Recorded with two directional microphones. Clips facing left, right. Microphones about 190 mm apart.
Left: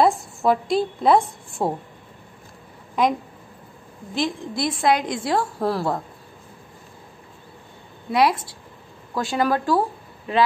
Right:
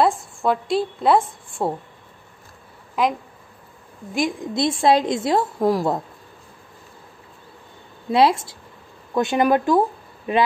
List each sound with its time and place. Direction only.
0.0 s a woman's voice: centre (ahead or behind)
3.0 s a woman's voice: 5° right (ahead or behind)
4.6 s a woman's voice: 25° right (ahead or behind)
8.1 s a woman's voice: 25° right (ahead or behind)